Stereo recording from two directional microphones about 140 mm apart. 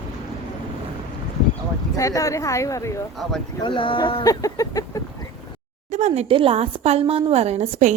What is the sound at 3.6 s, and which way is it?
Speech, 40° left (ahead or behind).